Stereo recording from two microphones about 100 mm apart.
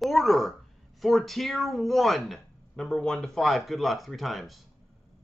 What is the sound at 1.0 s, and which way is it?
A man's voice, centre (ahead or behind).